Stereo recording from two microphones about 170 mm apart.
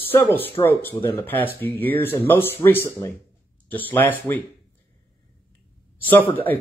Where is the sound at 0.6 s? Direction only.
15° left (ahead or behind).